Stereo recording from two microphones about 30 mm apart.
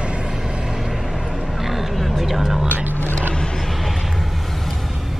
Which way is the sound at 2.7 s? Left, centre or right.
Right.